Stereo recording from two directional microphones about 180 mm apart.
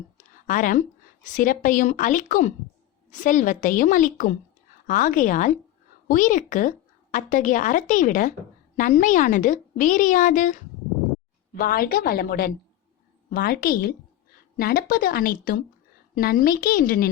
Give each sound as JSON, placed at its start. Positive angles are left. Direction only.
{"t": 0.4, "sound": "a woman's voice", "side_deg": 45}